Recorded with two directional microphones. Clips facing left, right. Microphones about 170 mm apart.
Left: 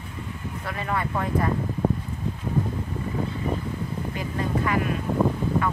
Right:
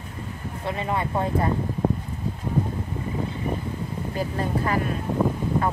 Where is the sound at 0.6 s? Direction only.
25° right (ahead or behind).